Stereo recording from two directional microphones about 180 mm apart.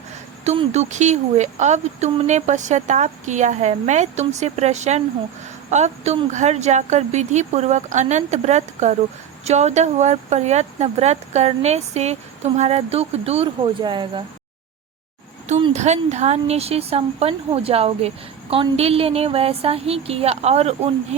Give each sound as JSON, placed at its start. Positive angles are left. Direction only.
{"t": 0.4, "sound": "speech", "side_deg": -40}
{"t": 15.7, "sound": "speech", "side_deg": -40}